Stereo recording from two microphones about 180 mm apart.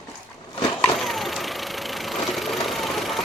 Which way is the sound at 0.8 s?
Centre (ahead or behind).